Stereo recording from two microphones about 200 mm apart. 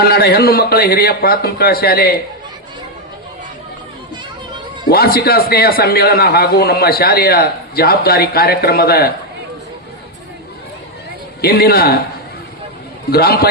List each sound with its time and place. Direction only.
0.0 s a man's voice: 50° left (ahead or behind)
4.9 s a man's voice: 50° left (ahead or behind)
11.3 s a man's voice: 50° left (ahead or behind)
13.1 s a man's voice: 50° left (ahead or behind)